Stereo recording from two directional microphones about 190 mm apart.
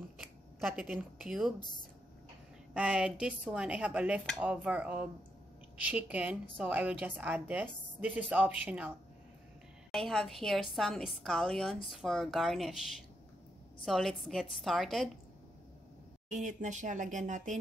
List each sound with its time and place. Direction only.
0.2 s speech: centre (ahead or behind)
1.6 s speech: 25° left (ahead or behind)
2.7 s a woman's voice: 5° right (ahead or behind)
16.3 s speech: 40° right (ahead or behind)